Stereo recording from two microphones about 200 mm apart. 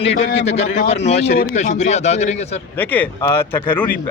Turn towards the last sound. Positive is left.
turn(degrees=10)  # may be behind; listen again after turning